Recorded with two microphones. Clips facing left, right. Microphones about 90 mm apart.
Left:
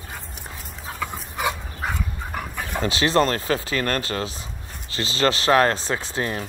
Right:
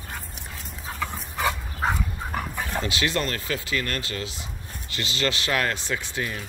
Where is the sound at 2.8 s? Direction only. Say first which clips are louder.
Left 7 dB; 35° left (ahead or behind).